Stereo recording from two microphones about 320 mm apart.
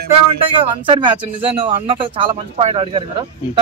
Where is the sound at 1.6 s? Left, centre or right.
Centre.